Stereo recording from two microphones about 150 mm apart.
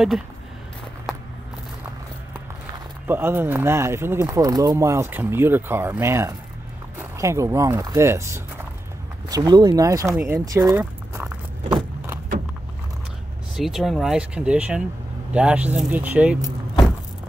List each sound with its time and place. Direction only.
3.1 s speech: 15° right (ahead or behind)
10.8 s biting: 10° right (ahead or behind)
13.6 s speech: centre (ahead or behind)